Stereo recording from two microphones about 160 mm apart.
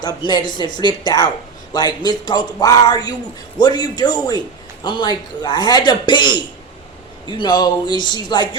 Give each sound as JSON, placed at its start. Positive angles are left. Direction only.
{"t": 0.0, "sound": "speech", "side_deg": 25}